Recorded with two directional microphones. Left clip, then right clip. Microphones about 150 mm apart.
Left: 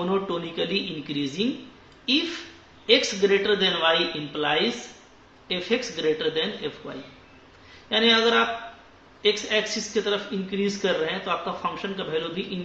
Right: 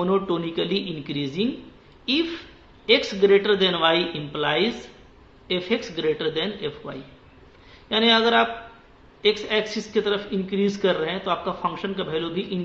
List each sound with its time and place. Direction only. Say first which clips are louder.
0.0 s speech: right 3 dB; 40° right (ahead or behind)
2.9 s a man's voice: right 2 dB; 40° right (ahead or behind)